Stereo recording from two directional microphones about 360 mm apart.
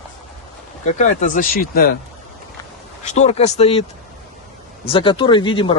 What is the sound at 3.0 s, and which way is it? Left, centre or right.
Speech, centre.